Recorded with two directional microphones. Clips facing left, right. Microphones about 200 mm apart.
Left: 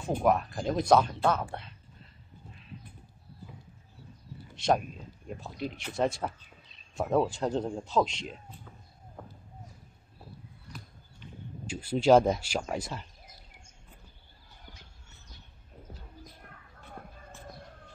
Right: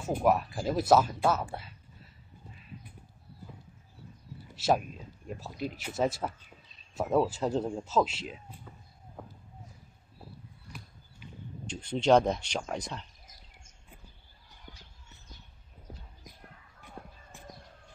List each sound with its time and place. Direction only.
0.0 s speech: 5° right (ahead or behind)
4.6 s speech: 5° right (ahead or behind)
11.6 s speech: 5° left (ahead or behind)
16.8 s a sound: 15° right (ahead or behind)